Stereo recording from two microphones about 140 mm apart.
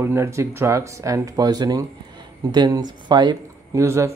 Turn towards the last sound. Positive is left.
turn(degrees=-20)  # may be behind; listen again after turning